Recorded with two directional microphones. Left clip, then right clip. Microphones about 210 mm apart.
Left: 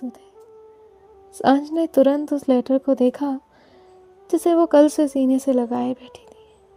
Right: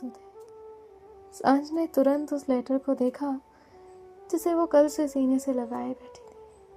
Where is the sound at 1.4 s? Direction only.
35° left (ahead or behind).